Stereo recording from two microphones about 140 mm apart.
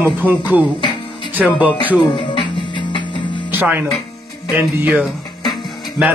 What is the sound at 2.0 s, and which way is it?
Music, 35° left (ahead or behind).